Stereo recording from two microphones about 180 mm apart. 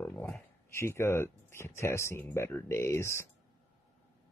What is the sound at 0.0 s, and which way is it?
Speech, 10° left (ahead or behind).